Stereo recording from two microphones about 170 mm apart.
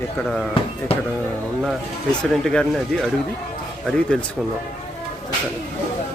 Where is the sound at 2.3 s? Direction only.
5° left (ahead or behind).